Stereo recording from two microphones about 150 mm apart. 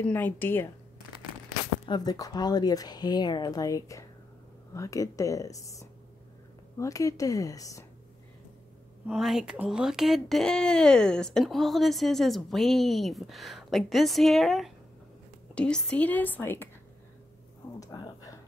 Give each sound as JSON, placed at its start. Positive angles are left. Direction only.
{"t": 0.0, "sound": "speech", "side_deg": 10}
{"t": 1.9, "sound": "speech", "side_deg": 25}
{"t": 9.0, "sound": "speech", "side_deg": 0}
{"t": 17.7, "sound": "speech", "side_deg": 25}